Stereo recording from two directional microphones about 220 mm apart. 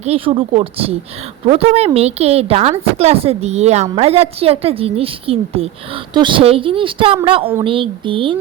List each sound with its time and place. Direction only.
0.0 s a woman's voice: 25° right (ahead or behind)